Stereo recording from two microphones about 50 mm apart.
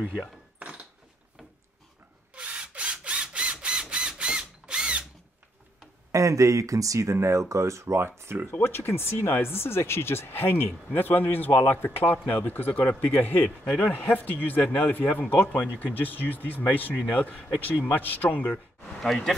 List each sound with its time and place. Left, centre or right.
0.6 s a sound: right
2.3 s a sound: right
4.2 s drill: centre
6.1 s speech: right
8.5 s a man's voice: left
17.8 s a man's voice: left